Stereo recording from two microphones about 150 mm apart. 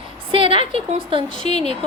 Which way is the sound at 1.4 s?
45° left (ahead or behind).